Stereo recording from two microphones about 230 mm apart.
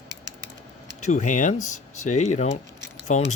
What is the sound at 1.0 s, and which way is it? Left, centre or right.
Speech, left.